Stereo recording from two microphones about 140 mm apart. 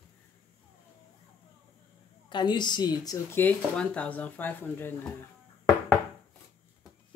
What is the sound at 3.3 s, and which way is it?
A man's voice, 10° left (ahead or behind).